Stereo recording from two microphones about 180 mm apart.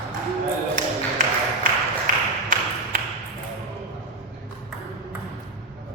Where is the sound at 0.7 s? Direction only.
45° right (ahead or behind).